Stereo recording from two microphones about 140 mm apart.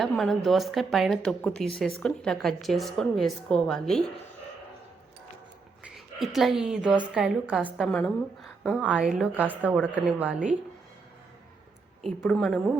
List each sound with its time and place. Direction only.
0.0 s a woman's voice: centre (ahead or behind)
5.9 s a woman's voice: centre (ahead or behind)
8.4 s a sound: 10° left (ahead or behind)
8.8 s a woman's voice: 5° right (ahead or behind)
12.2 s a woman's voice: 5° left (ahead or behind)